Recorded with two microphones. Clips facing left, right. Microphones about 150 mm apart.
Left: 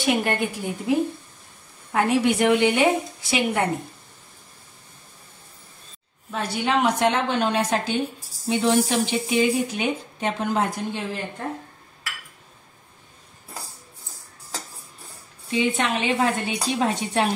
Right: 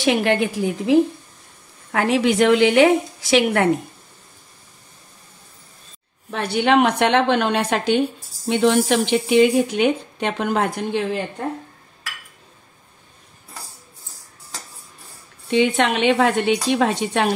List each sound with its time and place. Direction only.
0.0 s a woman's voice: 90° right
6.3 s speech: 65° right (ahead or behind)
8.5 s speech: 80° right
15.5 s speech: 75° right (ahead or behind)